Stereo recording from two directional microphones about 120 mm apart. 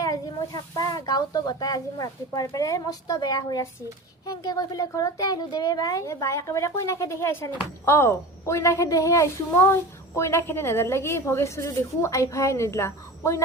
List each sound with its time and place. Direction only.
0.0 s speech: 30° left (ahead or behind)